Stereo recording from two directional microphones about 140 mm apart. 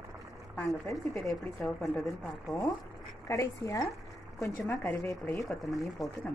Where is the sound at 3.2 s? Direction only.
20° left (ahead or behind).